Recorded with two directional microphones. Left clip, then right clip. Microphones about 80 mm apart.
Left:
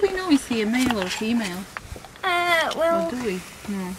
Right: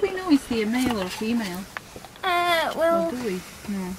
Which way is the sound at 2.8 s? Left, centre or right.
Centre.